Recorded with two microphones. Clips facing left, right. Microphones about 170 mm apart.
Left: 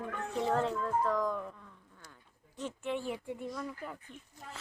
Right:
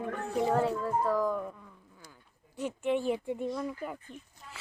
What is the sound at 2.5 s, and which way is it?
Speech, 15° right (ahead or behind).